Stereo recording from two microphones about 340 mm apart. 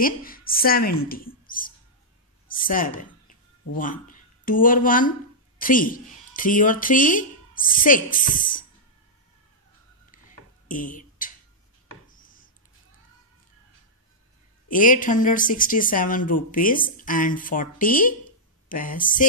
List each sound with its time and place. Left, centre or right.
0.0 s a woman's voice: left
10.7 s a sound: left
14.7 s speech: left